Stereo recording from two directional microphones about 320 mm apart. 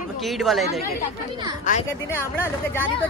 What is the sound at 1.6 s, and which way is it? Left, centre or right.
Speech, left.